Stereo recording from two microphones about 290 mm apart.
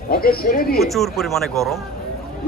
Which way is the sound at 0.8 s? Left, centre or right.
Centre.